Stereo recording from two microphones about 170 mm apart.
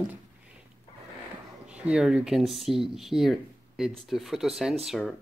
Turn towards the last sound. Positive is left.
turn(degrees=0)  # may be behind; listen again after turning